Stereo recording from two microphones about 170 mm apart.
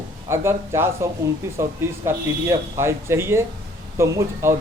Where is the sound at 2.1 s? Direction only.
15° right (ahead or behind).